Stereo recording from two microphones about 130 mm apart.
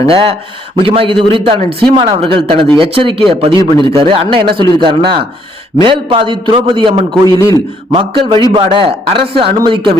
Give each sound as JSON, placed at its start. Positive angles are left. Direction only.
{"t": 0.1, "sound": "a man's voice", "side_deg": -45}